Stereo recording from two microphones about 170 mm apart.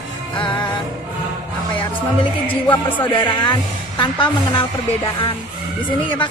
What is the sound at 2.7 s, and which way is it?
Speech, 30° left (ahead or behind).